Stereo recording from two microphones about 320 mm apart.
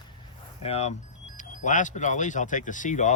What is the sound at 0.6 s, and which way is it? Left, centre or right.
Speech, centre.